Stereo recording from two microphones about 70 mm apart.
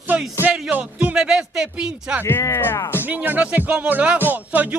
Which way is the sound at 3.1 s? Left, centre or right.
Right.